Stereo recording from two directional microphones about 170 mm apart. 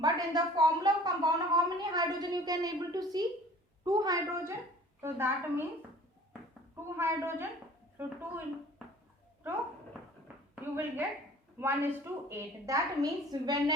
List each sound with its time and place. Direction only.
0.0 s a woman's voice: 20° right (ahead or behind)
6.9 s a woman's voice: 15° right (ahead or behind)
10.5 s a woman's voice: 10° right (ahead or behind)